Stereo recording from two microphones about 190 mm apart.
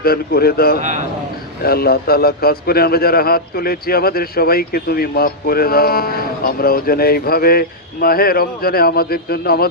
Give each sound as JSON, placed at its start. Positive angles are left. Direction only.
{"t": 0.0, "sound": "a man's voice", "side_deg": 55}
{"t": 0.8, "sound": "a man's voice", "side_deg": -40}
{"t": 1.6, "sound": "a man's voice", "side_deg": 55}